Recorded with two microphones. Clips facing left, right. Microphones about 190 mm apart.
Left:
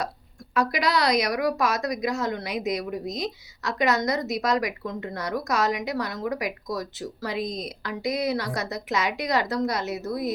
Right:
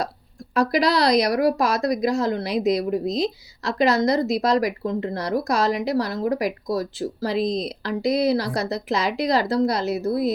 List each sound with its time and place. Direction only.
0.5 s a woman's voice: 35° right (ahead or behind)